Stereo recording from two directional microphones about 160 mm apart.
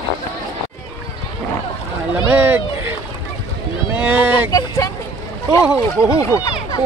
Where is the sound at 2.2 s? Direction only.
10° right (ahead or behind).